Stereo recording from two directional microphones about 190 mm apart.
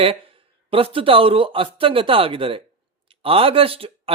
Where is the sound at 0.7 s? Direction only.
30° right (ahead or behind).